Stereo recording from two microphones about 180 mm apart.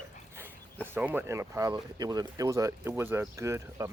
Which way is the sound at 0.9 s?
10° right (ahead or behind).